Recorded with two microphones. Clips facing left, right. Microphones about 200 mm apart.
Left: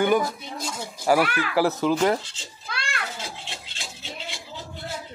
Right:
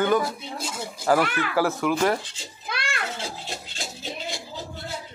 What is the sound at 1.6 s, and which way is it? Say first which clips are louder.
Speech: left 2 dB; 20° left (ahead or behind).